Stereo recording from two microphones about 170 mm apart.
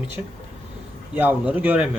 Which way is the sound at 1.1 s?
10° right (ahead or behind).